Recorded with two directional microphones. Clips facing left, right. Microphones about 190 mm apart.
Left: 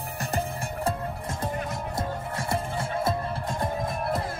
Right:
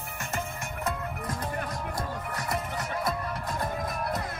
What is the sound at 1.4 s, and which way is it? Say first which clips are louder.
Music: left 5 dB; 25° left (ahead or behind).